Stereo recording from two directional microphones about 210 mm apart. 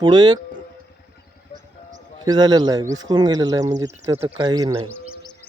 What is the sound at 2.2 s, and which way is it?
Speech, 20° right (ahead or behind).